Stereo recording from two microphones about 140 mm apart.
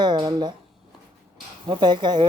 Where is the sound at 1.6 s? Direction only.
35° right (ahead or behind).